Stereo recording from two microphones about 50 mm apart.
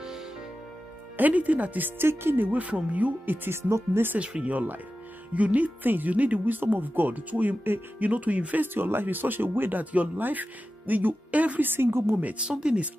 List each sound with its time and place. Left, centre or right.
1.1 s speech: right
2.0 s speech: right
2.5 s speech: right
3.4 s speech: right
4.2 s speech: right
4.6 s speech: right
8.7 s speech: right
11.6 s speech: right
12.4 s speech: centre